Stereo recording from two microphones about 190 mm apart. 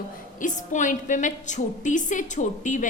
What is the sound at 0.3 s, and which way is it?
A woman's voice, 40° left (ahead or behind).